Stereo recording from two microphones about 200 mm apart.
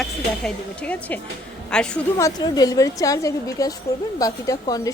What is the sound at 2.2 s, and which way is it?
A woman's voice, 20° left (ahead or behind).